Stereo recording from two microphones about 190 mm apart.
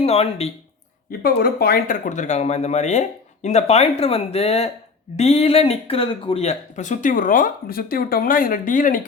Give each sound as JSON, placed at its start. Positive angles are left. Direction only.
{"t": 0.0, "sound": "speech", "side_deg": 30}
{"t": 1.2, "sound": "a man's voice", "side_deg": 55}